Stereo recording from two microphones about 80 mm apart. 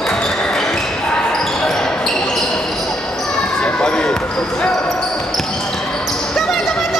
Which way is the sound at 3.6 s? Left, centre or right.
Centre.